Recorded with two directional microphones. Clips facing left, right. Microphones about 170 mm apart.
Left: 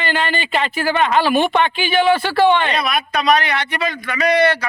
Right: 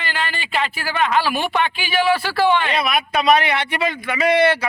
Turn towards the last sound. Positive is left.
turn(degrees=-25)  # may be behind; listen again after turning